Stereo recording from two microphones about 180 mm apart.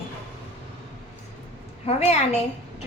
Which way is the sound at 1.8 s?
35° left (ahead or behind).